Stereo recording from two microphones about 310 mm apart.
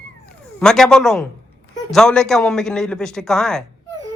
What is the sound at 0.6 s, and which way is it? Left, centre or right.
A man's voice, centre.